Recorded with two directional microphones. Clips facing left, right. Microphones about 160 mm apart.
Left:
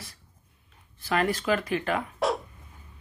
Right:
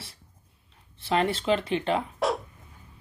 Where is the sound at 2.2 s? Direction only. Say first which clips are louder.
Even; centre (ahead or behind).